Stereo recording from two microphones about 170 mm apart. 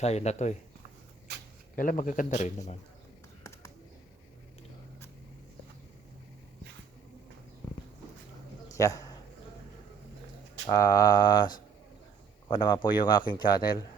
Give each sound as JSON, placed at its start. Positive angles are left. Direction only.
{"t": 0.0, "sound": "speech", "side_deg": 40}
{"t": 1.7, "sound": "speech", "side_deg": 55}
{"t": 8.7, "sound": "a sound", "side_deg": 20}
{"t": 10.8, "sound": "speech", "side_deg": 20}